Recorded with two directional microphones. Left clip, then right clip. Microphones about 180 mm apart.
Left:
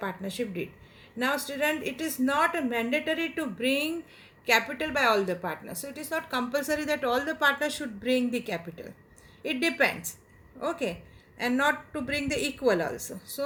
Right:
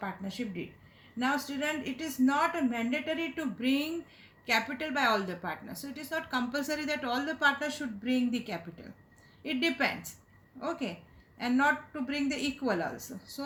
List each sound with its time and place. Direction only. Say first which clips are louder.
0.0 s a woman's voice: left 5 dB; 35° left (ahead or behind)